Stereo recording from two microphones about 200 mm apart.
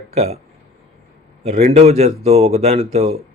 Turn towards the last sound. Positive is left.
turn(degrees=-30)  # may be behind; listen again after turning